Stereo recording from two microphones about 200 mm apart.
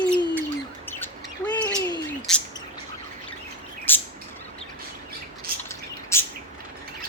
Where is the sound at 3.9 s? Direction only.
10° left (ahead or behind).